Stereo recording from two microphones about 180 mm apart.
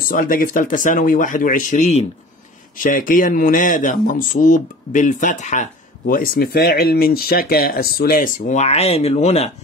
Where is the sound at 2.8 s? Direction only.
50° left (ahead or behind).